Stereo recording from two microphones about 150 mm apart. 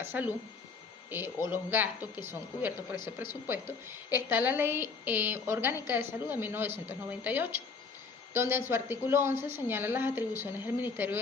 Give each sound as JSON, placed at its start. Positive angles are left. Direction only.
{"t": 0.0, "sound": "a woman's voice", "side_deg": -10}